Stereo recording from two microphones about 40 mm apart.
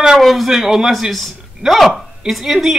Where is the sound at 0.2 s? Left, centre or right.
Centre.